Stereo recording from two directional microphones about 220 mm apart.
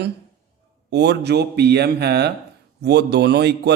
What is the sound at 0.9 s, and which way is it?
Speech, 50° right (ahead or behind).